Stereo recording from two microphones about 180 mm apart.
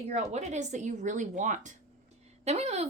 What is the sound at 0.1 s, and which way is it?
Speech, 40° right (ahead or behind).